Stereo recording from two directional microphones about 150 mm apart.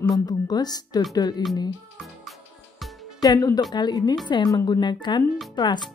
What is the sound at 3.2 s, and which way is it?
Speech, 25° left (ahead or behind).